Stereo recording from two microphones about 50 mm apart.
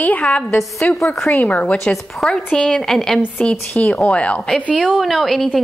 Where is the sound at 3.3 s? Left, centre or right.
Left.